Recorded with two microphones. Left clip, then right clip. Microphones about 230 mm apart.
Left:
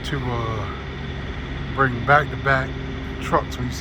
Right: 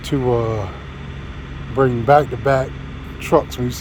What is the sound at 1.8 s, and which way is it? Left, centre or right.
Speech, right.